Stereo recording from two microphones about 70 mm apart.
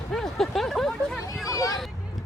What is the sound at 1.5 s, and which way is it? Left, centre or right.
Hubbub, left.